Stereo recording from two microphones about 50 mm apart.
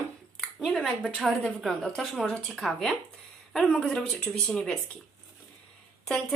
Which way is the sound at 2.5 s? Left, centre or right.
Centre.